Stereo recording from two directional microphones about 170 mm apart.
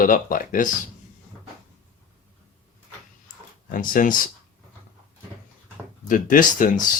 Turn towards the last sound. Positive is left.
turn(degrees=50)  # may be behind; listen again after turning